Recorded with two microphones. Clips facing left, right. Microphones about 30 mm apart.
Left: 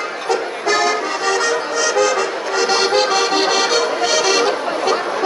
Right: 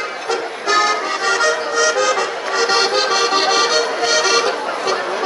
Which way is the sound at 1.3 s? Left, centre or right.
Centre.